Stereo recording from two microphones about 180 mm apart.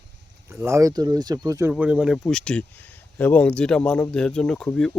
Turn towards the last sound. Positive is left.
turn(degrees=5)  # may be behind; listen again after turning